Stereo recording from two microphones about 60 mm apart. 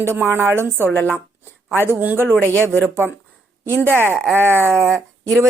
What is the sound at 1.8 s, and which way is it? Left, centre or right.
Speech, right.